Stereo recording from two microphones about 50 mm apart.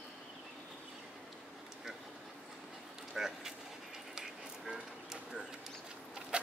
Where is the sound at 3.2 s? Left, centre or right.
Centre.